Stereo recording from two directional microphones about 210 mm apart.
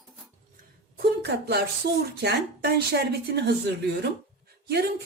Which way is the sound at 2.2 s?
50° right (ahead or behind).